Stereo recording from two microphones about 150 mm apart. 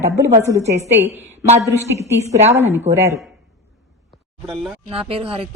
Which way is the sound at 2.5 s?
15° right (ahead or behind).